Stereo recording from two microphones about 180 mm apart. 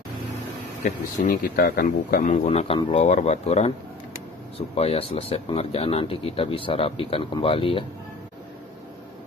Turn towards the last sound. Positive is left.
turn(degrees=30)  # may be behind; listen again after turning